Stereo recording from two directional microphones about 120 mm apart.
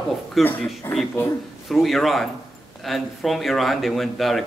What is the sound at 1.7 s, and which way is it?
Speech, centre (ahead or behind).